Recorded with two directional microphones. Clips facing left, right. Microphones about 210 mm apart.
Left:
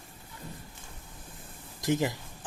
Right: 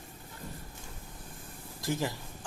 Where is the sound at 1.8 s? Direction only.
20° left (ahead or behind).